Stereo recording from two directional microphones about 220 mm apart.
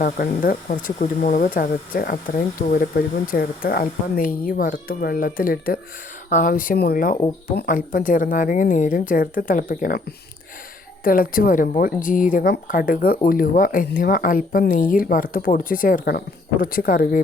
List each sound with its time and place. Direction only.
0.0 s a woman's voice: 40° left (ahead or behind)
11.0 s a woman's voice: 40° left (ahead or behind)